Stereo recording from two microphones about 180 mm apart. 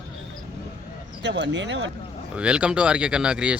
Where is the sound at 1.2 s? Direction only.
75° right (ahead or behind).